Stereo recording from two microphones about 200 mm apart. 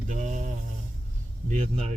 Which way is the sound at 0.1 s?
35° right (ahead or behind).